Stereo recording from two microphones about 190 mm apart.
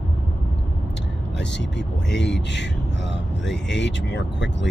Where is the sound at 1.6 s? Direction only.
65° left (ahead or behind).